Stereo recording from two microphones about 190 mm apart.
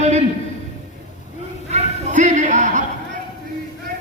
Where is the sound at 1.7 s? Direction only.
40° right (ahead or behind).